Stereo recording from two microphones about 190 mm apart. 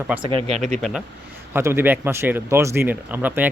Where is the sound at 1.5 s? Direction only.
10° right (ahead or behind).